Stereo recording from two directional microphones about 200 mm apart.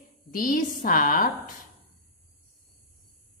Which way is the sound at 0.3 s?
45° left (ahead or behind).